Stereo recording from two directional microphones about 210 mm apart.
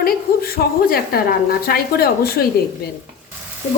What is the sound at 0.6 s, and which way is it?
A woman's voice, 45° left (ahead or behind).